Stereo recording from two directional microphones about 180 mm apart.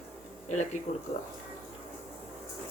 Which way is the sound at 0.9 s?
45° left (ahead or behind).